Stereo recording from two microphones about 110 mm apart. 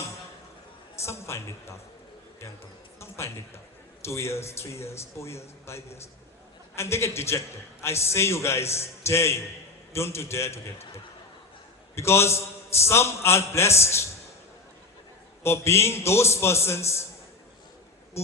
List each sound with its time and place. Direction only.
1.0 s a woman's voice: 25° left (ahead or behind)
3.0 s a man's voice: 25° left (ahead or behind)
15.4 s a man's voice: 25° left (ahead or behind)